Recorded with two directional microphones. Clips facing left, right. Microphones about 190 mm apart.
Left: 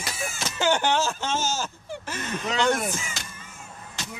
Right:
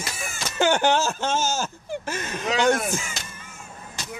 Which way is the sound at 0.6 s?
50° right (ahead or behind).